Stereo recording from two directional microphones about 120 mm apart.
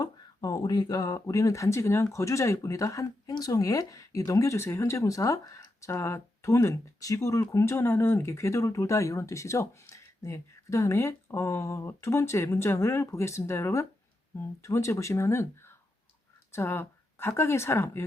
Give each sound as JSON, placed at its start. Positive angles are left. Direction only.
{"t": 0.0, "sound": "speech", "side_deg": 35}